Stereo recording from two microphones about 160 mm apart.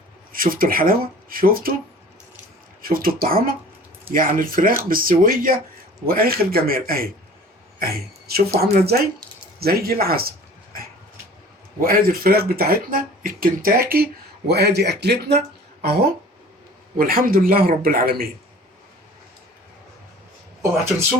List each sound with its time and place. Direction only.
0.3 s speech: 60° right (ahead or behind)
2.8 s a man's voice: 65° right (ahead or behind)
11.8 s speech: 65° right (ahead or behind); by 15.4 s 90° right
15.8 s speech: 80° right
17.0 s speech: 65° right (ahead or behind)